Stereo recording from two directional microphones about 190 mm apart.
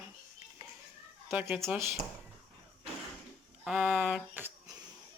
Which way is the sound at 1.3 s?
10° right (ahead or behind).